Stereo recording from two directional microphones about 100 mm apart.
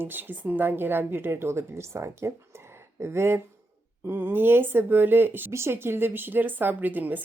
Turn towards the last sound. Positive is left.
turn(degrees=-15)  # may be behind; listen again after turning